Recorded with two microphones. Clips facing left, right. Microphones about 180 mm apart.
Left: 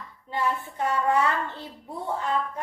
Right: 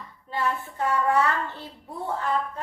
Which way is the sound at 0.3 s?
20° left (ahead or behind).